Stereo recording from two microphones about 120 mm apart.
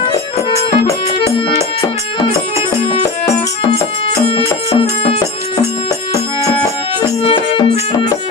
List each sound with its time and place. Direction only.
4.3 s music: 50° left (ahead or behind)
7.2 s music: 45° left (ahead or behind)